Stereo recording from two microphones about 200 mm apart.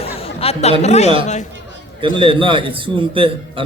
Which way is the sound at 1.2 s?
35° left (ahead or behind).